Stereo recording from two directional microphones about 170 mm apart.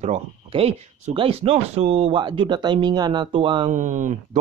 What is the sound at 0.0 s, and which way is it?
Speech, 35° right (ahead or behind).